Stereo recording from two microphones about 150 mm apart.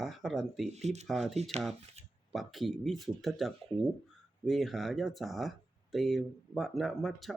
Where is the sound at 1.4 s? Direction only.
45° right (ahead or behind).